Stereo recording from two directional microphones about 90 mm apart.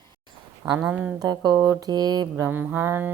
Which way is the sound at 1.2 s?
50° right (ahead or behind).